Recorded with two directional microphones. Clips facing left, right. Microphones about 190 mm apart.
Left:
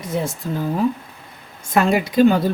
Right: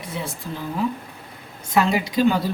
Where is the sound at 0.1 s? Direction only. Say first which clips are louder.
Left 8 dB; 45° left (ahead or behind).